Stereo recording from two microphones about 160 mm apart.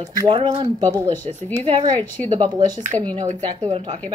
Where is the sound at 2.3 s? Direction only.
25° right (ahead or behind).